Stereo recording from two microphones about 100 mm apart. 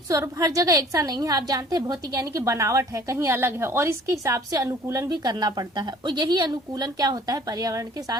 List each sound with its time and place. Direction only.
0.2 s a woman's voice: 30° right (ahead or behind)
2.2 s speech: 30° right (ahead or behind)
5.0 s a woman's voice: 45° right (ahead or behind)